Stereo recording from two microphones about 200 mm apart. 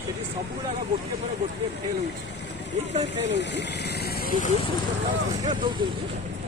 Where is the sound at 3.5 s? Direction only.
55° left (ahead or behind).